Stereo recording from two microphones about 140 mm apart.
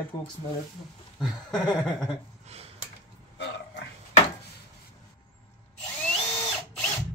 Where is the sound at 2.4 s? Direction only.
50° right (ahead or behind).